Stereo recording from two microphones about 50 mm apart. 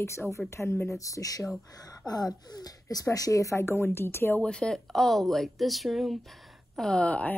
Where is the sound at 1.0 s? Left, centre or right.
Left.